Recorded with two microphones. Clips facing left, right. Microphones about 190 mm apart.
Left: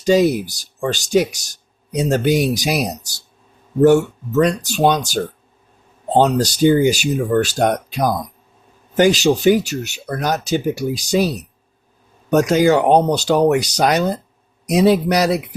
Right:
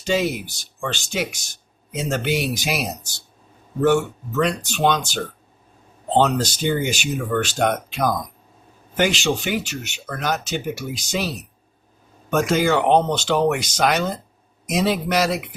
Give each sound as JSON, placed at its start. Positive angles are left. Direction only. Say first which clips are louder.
{"t": 0.0, "sound": "speech", "louder": "left 8 dB", "side_deg": 40}
{"t": 4.4, "sound": "speech", "louder": "left 1 dB", "side_deg": 40}
{"t": 6.1, "sound": "speech", "louder": "left 4 dB", "side_deg": 40}
{"t": 12.3, "sound": "speech", "louder": "left 5 dB", "side_deg": 40}